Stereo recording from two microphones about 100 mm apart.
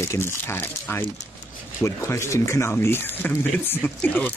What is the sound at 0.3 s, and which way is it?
Speech, 20° left (ahead or behind).